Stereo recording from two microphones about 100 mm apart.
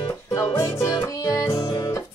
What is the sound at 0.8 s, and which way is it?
Music, 30° left (ahead or behind).